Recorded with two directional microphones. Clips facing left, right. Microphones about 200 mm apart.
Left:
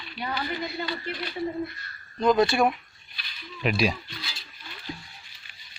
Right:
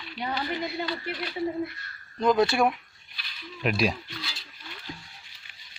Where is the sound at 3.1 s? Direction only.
Centre (ahead or behind).